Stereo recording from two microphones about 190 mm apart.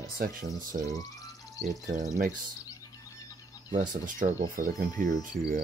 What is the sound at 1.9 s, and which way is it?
Speech, 40° right (ahead or behind).